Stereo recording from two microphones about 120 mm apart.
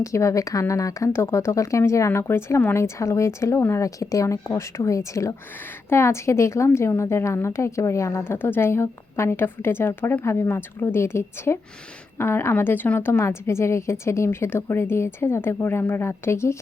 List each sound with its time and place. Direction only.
0.0 s a woman's voice: 25° left (ahead or behind)